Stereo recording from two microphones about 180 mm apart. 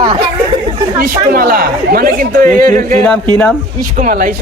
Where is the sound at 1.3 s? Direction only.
55° right (ahead or behind).